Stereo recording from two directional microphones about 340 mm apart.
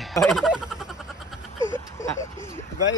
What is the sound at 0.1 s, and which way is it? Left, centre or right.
Speech, centre.